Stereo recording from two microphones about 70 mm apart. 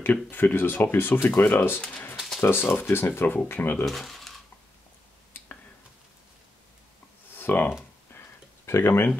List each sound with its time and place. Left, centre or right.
0.0 s speech: left
1.2 s speech: centre
2.4 s speech: left
3.8 s speech: centre
7.3 s a sound: left
8.6 s speech: left